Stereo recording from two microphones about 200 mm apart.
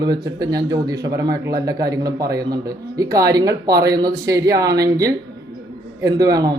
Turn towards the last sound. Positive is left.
turn(degrees=-20)  # may be behind; listen again after turning